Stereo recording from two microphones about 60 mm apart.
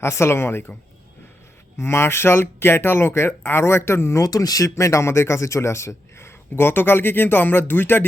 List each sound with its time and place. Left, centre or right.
0.0 s speech: left
1.8 s speech: left
4.2 s speech: left
4.7 s speech: left